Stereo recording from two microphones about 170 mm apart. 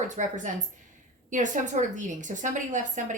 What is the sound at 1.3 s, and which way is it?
A woman's voice, 45° right (ahead or behind).